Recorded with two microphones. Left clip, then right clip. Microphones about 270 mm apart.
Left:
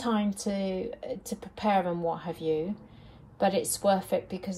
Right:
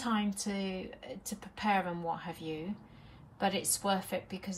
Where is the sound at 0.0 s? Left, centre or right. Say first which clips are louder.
Left 5 dB; centre.